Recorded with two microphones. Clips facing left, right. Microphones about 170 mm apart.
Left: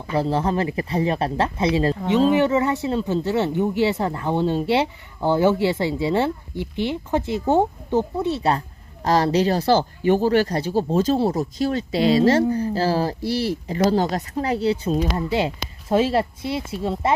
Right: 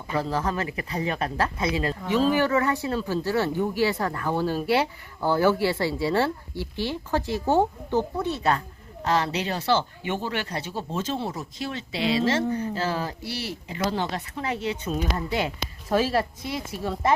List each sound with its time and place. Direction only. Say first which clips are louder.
0.1 s speech: left 5 dB; 30° left (ahead or behind)